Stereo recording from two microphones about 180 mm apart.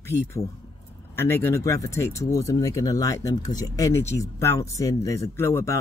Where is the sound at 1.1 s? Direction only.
10° left (ahead or behind).